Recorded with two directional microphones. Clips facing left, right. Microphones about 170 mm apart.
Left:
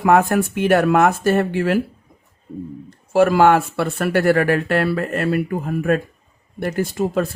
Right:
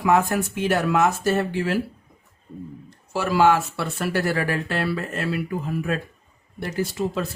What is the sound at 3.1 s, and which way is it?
Speech, 55° left (ahead or behind).